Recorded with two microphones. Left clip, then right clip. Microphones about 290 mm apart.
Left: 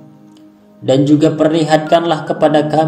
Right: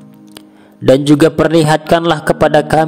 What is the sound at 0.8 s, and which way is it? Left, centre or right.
A man's voice, right.